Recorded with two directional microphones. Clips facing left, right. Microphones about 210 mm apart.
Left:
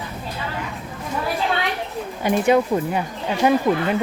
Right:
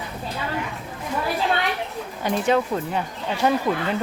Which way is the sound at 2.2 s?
10° left (ahead or behind).